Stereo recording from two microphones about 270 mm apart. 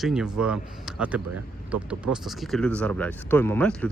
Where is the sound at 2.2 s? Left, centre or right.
Centre.